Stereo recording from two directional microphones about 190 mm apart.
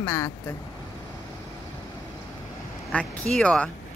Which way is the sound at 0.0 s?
15° left (ahead or behind).